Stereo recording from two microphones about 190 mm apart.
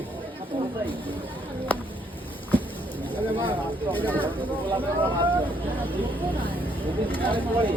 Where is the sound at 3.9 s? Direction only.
10° left (ahead or behind).